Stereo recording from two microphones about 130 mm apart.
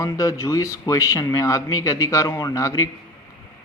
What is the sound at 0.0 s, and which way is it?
A man's voice, 25° left (ahead or behind).